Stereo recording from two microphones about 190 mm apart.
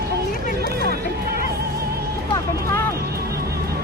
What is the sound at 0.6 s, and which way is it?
Music, 55° right (ahead or behind).